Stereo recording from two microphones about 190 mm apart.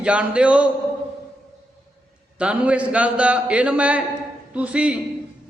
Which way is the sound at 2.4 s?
5° right (ahead or behind).